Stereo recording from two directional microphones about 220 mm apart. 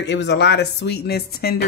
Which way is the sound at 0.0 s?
50° left (ahead or behind).